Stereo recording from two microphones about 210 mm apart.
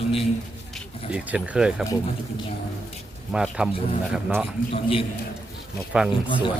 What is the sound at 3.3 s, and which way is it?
Speech, 5° right (ahead or behind).